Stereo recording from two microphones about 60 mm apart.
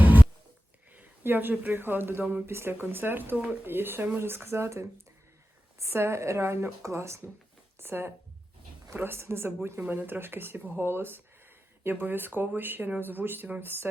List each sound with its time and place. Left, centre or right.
0.0 s a sound: right
0.9 s speech: right
7.8 s speech: right